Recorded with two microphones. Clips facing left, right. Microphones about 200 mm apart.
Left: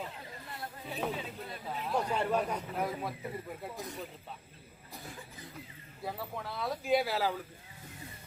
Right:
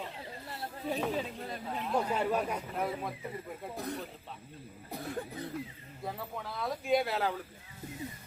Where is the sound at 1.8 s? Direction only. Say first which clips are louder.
Right 1 dB; 5° right (ahead or behind).